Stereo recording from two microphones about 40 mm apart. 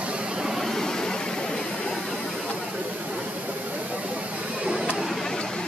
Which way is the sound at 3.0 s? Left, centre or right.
Right.